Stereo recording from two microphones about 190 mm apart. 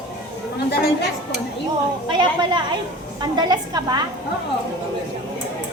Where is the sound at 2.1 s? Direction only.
25° right (ahead or behind).